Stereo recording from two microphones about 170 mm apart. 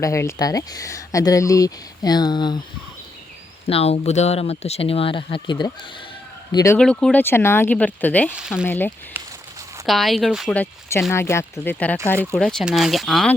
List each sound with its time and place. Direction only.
0.0 s speech: 15° left (ahead or behind)
3.7 s speech: 35° left (ahead or behind); by 6.7 s 20° left (ahead or behind)
6.7 s speech: 5° left (ahead or behind)
8.4 s speech: 5° right (ahead or behind)
8.6 s speech: 10° left (ahead or behind)
9.2 s a sound: 10° right (ahead or behind)
9.8 s speech: centre (ahead or behind)
10.5 s speech: 15° left (ahead or behind)